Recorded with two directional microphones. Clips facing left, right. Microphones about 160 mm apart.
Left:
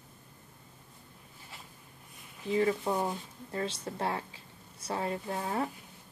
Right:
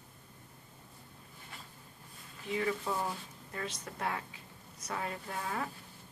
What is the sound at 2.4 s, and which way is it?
Speech, 30° left (ahead or behind).